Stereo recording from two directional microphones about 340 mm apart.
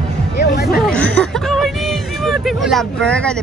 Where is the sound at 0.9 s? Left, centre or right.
Centre.